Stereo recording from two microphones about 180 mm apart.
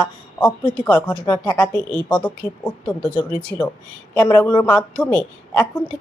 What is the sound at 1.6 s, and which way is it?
A woman's voice, 5° left (ahead or behind).